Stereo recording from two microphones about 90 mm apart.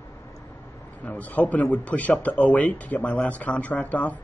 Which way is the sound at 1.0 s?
15° left (ahead or behind).